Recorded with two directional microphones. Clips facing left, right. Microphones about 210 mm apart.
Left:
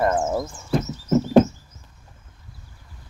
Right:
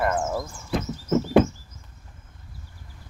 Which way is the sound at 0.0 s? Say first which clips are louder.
Left 3 dB; 25° left (ahead or behind).